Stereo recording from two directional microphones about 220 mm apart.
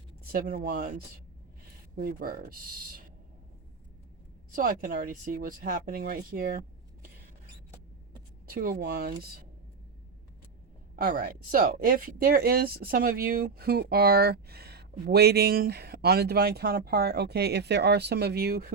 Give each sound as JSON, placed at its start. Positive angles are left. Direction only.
{"t": 0.3, "sound": "speech", "side_deg": -45}
{"t": 2.0, "sound": "speech", "side_deg": -40}
{"t": 4.5, "sound": "speech", "side_deg": -40}
{"t": 8.4, "sound": "speech", "side_deg": -40}
{"t": 10.9, "sound": "speech", "side_deg": -40}